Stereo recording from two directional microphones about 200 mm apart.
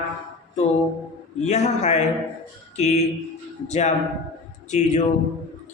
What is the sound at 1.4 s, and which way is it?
Speech, 35° left (ahead or behind).